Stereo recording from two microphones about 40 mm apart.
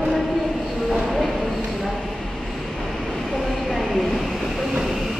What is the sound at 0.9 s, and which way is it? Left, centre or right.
Train, centre.